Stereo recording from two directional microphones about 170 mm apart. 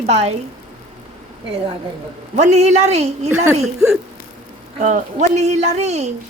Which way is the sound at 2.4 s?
40° right (ahead or behind).